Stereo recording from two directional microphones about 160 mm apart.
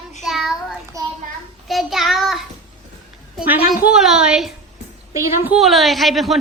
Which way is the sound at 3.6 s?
60° left (ahead or behind).